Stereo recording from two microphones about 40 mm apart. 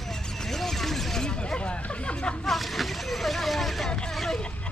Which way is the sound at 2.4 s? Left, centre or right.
Centre.